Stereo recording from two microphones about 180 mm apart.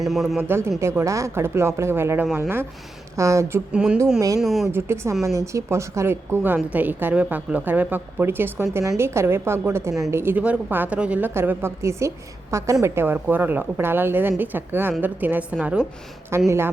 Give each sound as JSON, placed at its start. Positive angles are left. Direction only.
{"t": 0.0, "sound": "speech", "side_deg": 0}
{"t": 0.3, "sound": "a woman's voice", "side_deg": -15}
{"t": 3.7, "sound": "speech", "side_deg": -5}
{"t": 4.7, "sound": "a woman's voice", "side_deg": -15}